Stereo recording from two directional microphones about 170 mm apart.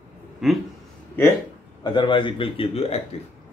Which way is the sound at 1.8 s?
25° left (ahead or behind).